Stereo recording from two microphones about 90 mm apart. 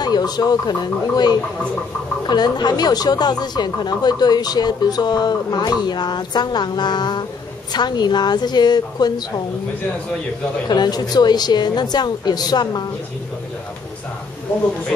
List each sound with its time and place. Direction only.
0.0 s speech: 50° left (ahead or behind)
10.7 s speech: 50° left (ahead or behind)